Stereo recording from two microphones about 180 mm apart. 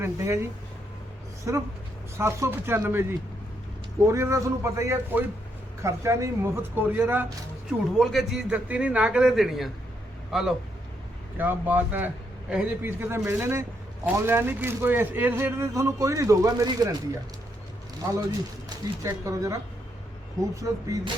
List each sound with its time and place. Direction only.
0.0 s a man's voice: 15° right (ahead or behind)
1.5 s a man's voice: 15° right (ahead or behind)
7.9 s a man's voice: centre (ahead or behind)
11.3 s a man's voice: 10° right (ahead or behind)
18.7 s a sound: 25° right (ahead or behind)
19.0 s a man's voice: 15° right (ahead or behind)
20.6 s speech: 20° right (ahead or behind)